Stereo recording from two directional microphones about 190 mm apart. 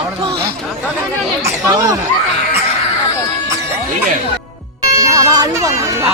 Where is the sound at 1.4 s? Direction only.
20° right (ahead or behind).